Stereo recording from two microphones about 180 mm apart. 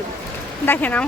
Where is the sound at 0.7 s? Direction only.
10° left (ahead or behind).